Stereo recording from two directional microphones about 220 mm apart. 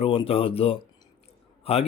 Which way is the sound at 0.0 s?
25° left (ahead or behind).